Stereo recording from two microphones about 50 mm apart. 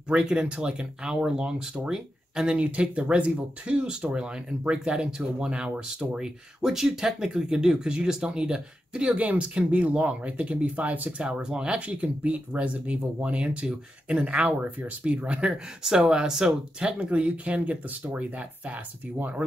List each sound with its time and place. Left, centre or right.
0.1 s speech: right
9.2 s speech: right; by 16.9 s centre
17.0 s speech: right